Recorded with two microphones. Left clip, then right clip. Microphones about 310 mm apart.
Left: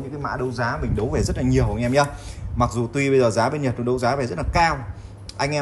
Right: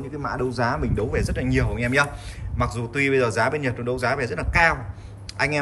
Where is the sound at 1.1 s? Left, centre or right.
Centre.